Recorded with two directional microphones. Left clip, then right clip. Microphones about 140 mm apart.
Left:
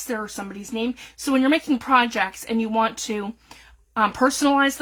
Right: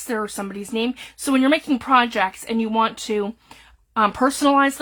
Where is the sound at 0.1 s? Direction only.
45° right (ahead or behind).